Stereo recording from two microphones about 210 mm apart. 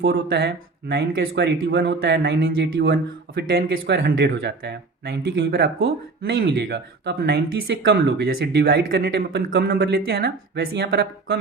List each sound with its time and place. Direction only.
0.0 s speech: 50° right (ahead or behind)